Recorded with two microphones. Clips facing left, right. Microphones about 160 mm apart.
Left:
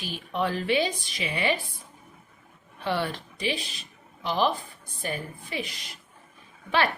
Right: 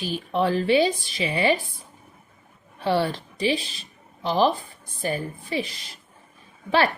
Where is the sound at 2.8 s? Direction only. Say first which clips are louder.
Right 5 dB; 35° right (ahead or behind).